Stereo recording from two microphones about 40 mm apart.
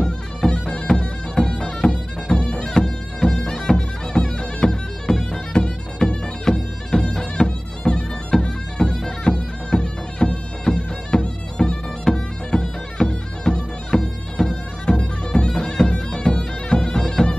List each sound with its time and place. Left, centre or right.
0.5 s music: left
5.5 s bagpipes: left
8.4 s music: left
15.0 s bagpipes: left